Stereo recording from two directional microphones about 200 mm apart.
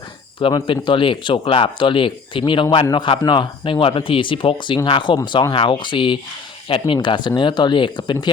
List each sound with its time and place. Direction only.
0.3 s speech: 25° left (ahead or behind)